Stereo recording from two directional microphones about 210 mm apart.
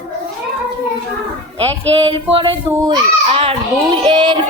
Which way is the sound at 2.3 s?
20° right (ahead or behind).